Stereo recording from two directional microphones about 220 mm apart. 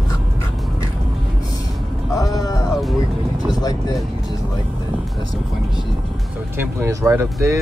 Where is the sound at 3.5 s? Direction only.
15° left (ahead or behind).